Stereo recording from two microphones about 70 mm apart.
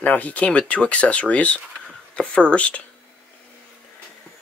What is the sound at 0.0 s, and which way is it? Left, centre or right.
Speech, left.